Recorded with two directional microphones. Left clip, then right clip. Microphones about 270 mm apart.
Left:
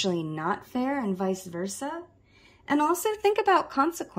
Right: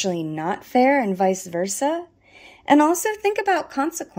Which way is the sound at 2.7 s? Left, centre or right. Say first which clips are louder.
Right 8 dB; centre.